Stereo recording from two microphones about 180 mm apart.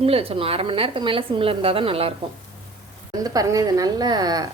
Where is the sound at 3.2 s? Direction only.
20° right (ahead or behind).